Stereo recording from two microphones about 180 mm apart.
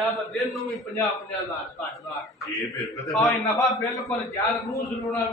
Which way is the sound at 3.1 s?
Centre (ahead or behind).